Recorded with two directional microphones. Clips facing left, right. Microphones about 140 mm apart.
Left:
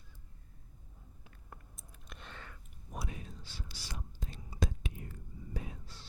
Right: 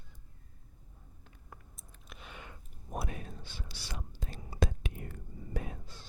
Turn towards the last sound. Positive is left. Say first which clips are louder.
# right 4 dB
turn(degrees=-50)  # may be behind; listen again after turning